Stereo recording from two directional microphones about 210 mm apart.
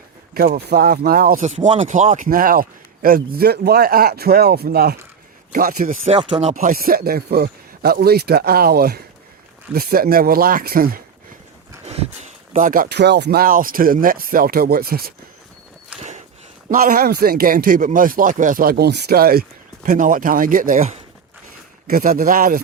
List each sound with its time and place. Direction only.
0.3 s speech: 45° right (ahead or behind)
6.1 s speech: 25° right (ahead or behind)
6.5 s speech: 40° right (ahead or behind)
11.9 s speech: 35° right (ahead or behind)
16.0 s walk: 35° right (ahead or behind)
16.6 s speech: 40° right (ahead or behind)